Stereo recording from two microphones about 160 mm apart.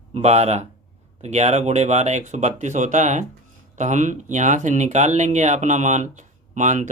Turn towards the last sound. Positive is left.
turn(degrees=-50)  # may be behind; listen again after turning